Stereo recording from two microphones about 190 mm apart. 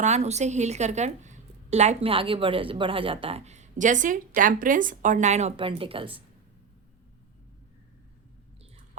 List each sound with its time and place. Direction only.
0.0 s a woman's voice: 35° right (ahead or behind)